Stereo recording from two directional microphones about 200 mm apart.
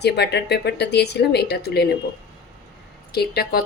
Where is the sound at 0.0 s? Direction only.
55° left (ahead or behind).